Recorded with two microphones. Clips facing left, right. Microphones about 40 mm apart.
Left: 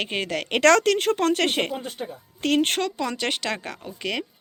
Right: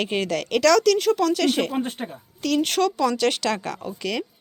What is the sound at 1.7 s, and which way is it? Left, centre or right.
Speech, right.